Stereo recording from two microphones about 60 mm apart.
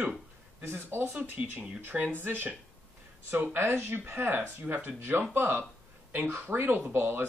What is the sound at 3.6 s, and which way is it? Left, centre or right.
Speech, right.